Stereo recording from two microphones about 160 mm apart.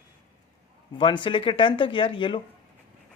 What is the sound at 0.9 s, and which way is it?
Speech, 30° left (ahead or behind).